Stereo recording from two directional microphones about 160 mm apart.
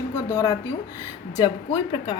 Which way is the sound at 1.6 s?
30° left (ahead or behind).